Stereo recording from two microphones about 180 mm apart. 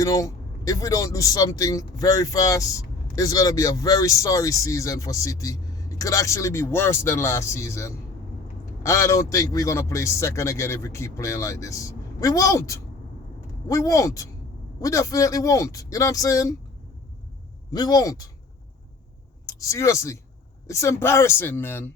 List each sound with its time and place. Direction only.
0.0 s speech: 20° left (ahead or behind)
17.7 s speech: 20° left (ahead or behind)
19.5 s speech: 20° left (ahead or behind)